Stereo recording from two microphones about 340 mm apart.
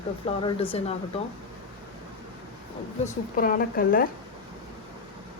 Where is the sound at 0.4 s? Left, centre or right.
Centre.